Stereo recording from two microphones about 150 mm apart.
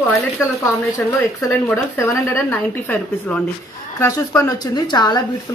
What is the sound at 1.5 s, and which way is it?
Speech, 15° left (ahead or behind).